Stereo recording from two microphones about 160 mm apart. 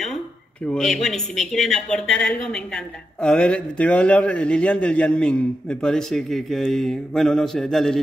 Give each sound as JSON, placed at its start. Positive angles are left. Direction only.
{"t": 0.7, "sound": "speech", "side_deg": 5}